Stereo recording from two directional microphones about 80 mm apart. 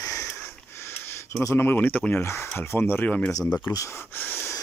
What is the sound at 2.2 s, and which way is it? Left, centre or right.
Speech, left.